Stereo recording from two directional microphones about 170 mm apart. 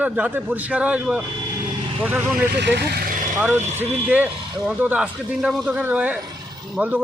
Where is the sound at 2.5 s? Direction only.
80° right; by 3.3 s 55° right (ahead or behind).